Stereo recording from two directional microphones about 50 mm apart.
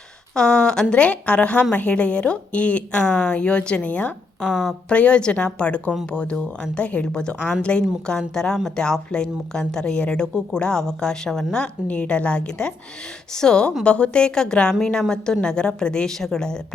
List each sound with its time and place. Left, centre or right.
0.3 s speech: centre
4.4 s speech: centre
4.9 s a woman's voice: left